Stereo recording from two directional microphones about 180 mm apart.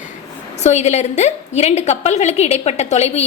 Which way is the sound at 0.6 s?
40° left (ahead or behind).